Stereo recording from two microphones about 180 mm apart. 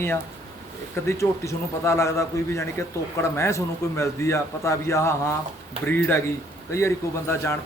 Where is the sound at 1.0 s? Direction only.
15° left (ahead or behind).